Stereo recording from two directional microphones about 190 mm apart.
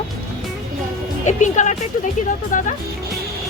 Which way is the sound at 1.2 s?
40° left (ahead or behind).